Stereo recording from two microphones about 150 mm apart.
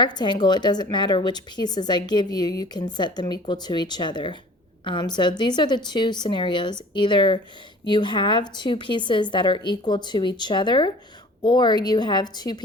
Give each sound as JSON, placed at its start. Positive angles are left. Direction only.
{"t": 0.0, "sound": "a woman's voice", "side_deg": 30}